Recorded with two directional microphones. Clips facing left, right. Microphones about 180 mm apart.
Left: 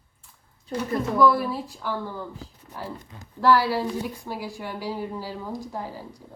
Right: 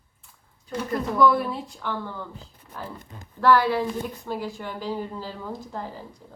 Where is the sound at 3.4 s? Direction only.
10° left (ahead or behind).